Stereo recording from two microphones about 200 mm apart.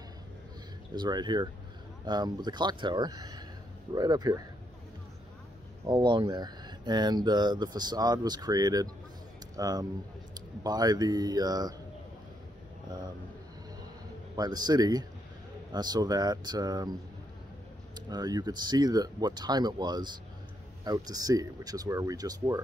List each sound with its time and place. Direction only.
0.9 s speech: 20° right (ahead or behind)
5.9 s speech: 20° right (ahead or behind)
14.3 s speech: 20° right (ahead or behind)
17.9 s speech: 20° right (ahead or behind)